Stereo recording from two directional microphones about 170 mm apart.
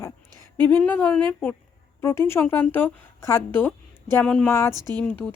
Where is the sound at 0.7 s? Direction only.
10° left (ahead or behind).